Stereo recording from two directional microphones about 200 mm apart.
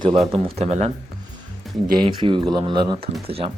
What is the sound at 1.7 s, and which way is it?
Music, centre (ahead or behind).